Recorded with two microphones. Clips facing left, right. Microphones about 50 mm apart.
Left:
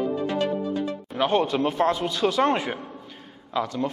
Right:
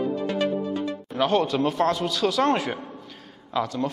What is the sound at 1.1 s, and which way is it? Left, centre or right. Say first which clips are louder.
A man's voice: even; centre.